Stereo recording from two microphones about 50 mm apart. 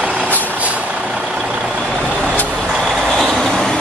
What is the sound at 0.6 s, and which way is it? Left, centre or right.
Vehicle, right.